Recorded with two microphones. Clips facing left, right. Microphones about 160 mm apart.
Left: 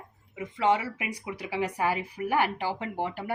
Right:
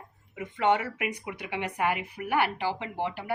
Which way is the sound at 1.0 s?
35° left (ahead or behind).